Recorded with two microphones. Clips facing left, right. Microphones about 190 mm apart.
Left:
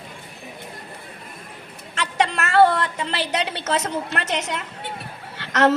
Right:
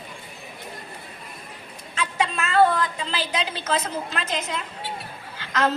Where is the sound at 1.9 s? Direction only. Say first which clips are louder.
Left 3 dB; 75° left (ahead or behind).